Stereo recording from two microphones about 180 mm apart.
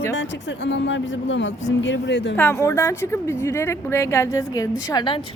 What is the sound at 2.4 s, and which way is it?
A woman's voice, 15° left (ahead or behind).